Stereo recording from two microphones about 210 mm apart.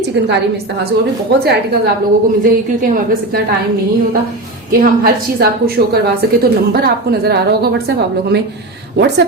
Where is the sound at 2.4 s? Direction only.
45° right (ahead or behind).